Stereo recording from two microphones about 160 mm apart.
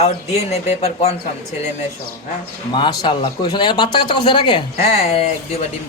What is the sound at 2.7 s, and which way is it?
A man's voice, 30° left (ahead or behind).